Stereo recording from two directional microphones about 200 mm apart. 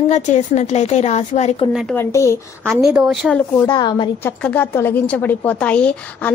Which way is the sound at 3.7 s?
20° left (ahead or behind).